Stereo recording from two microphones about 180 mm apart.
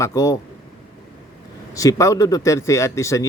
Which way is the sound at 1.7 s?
20° left (ahead or behind).